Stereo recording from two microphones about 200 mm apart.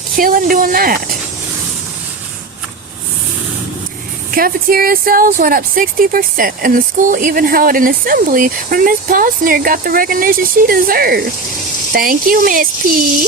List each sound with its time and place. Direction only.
0.2 s speech: 45° right (ahead or behind)
4.4 s speech: 45° right (ahead or behind)